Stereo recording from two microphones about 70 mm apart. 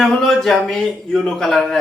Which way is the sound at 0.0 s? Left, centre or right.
Centre.